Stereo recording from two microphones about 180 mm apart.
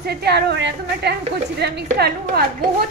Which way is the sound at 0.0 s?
65° right (ahead or behind).